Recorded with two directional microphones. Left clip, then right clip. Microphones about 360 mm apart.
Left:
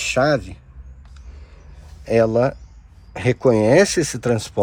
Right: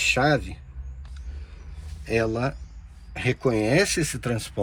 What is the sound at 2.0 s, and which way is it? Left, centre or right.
Speech, centre.